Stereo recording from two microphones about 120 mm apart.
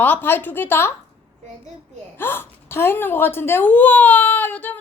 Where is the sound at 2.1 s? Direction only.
15° left (ahead or behind).